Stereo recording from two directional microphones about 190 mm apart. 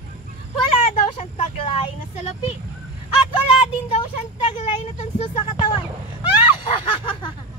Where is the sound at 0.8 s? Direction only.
35° left (ahead or behind).